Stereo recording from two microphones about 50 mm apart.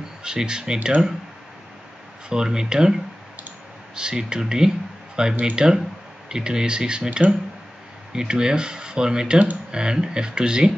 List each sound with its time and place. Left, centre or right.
0.2 s speech: centre
2.2 s speech: centre